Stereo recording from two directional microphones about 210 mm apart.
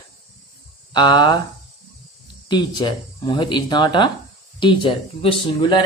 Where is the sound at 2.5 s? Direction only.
20° left (ahead or behind).